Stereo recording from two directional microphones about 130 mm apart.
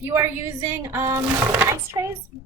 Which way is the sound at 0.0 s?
15° right (ahead or behind).